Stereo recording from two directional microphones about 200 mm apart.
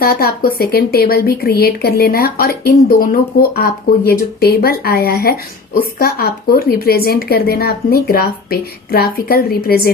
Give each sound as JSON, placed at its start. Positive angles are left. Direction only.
{"t": 0.0, "sound": "speech", "side_deg": 50}